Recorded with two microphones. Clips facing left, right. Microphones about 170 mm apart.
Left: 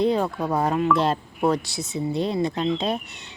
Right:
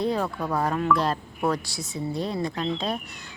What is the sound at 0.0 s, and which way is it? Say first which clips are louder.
Speech: left 4 dB; 20° left (ahead or behind).